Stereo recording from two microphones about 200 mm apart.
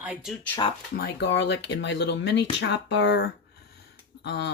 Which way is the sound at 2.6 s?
60° left (ahead or behind).